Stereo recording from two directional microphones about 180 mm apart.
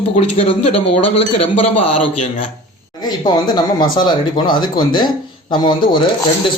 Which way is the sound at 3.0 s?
25° left (ahead or behind).